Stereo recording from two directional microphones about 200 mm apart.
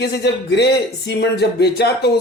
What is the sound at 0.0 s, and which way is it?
Speech, 55° left (ahead or behind).